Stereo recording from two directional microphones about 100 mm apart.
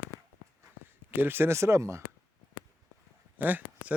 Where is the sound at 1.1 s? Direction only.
20° right (ahead or behind).